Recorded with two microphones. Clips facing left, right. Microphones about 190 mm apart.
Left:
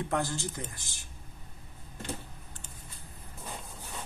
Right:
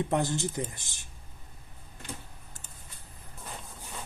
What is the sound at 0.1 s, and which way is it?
Speech, 20° right (ahead or behind).